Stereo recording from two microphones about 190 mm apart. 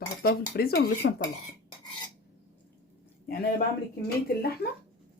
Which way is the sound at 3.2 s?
55° left (ahead or behind).